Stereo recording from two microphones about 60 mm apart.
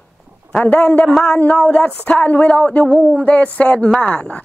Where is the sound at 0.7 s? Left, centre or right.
Left.